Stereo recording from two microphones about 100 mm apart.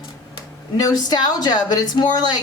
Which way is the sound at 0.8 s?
40° left (ahead or behind).